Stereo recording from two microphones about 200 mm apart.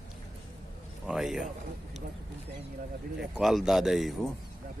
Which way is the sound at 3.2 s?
Centre (ahead or behind).